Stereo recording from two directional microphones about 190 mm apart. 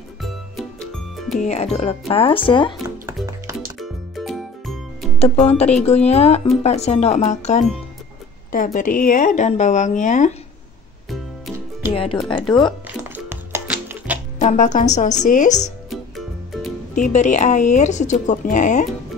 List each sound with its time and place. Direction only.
1.4 s speech: 35° left (ahead or behind)
3.8 s music: centre (ahead or behind)
5.2 s speech: 35° left (ahead or behind)
11.9 s speech: 30° left (ahead or behind)
13.0 s music: 10° right (ahead or behind)
14.4 s speech: 40° left (ahead or behind)
15.9 s music: centre (ahead or behind)
16.9 s speech: 40° left (ahead or behind)